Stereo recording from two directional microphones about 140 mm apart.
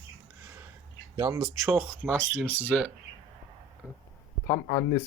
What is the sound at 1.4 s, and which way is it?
Speech, centre (ahead or behind).